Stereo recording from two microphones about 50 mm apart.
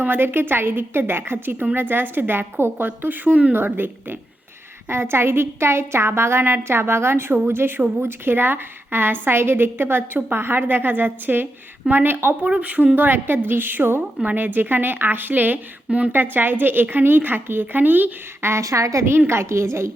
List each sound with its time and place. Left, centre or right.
0.0 s a woman's voice: right
2.8 s a woman's voice: right
4.9 s a woman's voice: right
12.5 s speech: right
13.0 s a woman's voice: right
15.9 s a woman's voice: right
16.1 s speech: right
18.4 s a woman's voice: right
19.3 s a woman's voice: right